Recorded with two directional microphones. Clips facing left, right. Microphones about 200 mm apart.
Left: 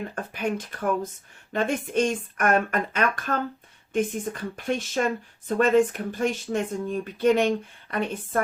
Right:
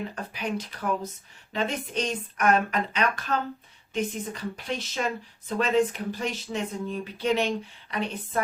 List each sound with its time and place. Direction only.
0.2 s speech: 50° left (ahead or behind)